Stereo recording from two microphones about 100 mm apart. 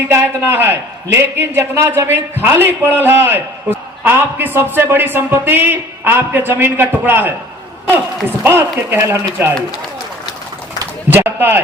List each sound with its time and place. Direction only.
0.1 s a man's voice: 25° right (ahead or behind)
8.4 s a man's voice: 25° right (ahead or behind)
11.1 s a man's voice: 20° right (ahead or behind)